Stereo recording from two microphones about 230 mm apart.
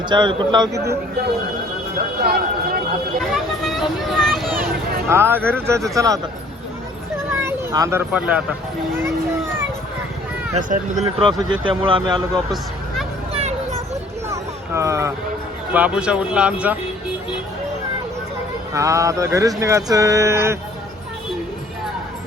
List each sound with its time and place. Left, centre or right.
0.0 s speech: centre
2.2 s speech: right
3.6 s a sound: centre
5.0 s speech: centre
5.4 s speech: centre
5.9 s speech: centre
7.4 s speech: centre
10.5 s speech: right; by 12.5 s centre
13.3 s children playing: right
14.3 s a sound: centre
15.7 s speech: centre
18.7 s speech: centre